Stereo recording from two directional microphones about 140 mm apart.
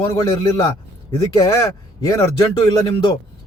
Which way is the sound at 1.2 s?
25° left (ahead or behind).